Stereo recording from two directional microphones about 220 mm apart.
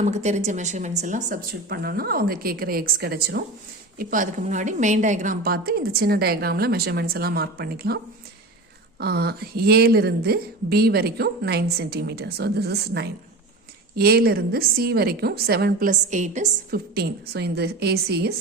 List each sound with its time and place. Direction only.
0.0 s a woman's voice: 30° right (ahead or behind)
9.0 s a woman's voice: 45° right (ahead or behind)